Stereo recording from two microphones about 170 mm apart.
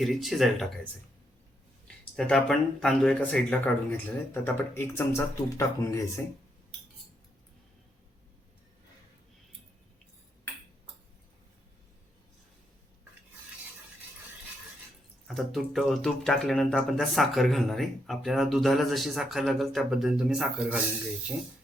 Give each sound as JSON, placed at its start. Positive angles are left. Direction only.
{"t": 0.0, "sound": "speech", "side_deg": 0}
{"t": 2.1, "sound": "speech", "side_deg": 5}
{"t": 15.3, "sound": "speech", "side_deg": 0}